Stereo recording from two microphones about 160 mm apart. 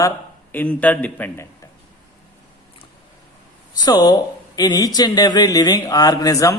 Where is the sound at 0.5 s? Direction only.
10° left (ahead or behind).